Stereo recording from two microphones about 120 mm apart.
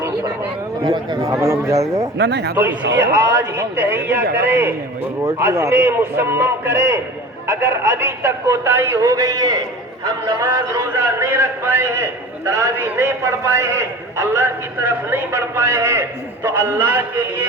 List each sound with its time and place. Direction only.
0.8 s speech: 35° right (ahead or behind)
1.3 s a man's voice: 25° right (ahead or behind)